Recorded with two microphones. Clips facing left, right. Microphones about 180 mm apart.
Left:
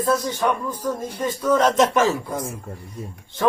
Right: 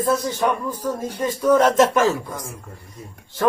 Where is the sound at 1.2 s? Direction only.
10° right (ahead or behind).